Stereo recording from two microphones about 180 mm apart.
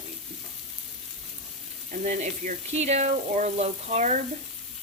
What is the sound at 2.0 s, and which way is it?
Speech, 40° right (ahead or behind).